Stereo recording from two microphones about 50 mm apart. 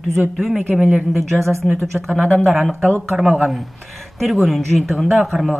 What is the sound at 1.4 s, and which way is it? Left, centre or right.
Speech, right.